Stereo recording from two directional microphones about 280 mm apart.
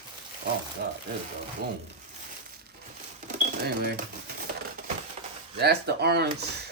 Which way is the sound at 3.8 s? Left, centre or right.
Right.